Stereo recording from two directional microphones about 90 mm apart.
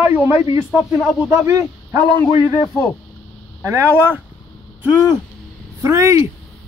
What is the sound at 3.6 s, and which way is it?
Speech, 25° right (ahead or behind).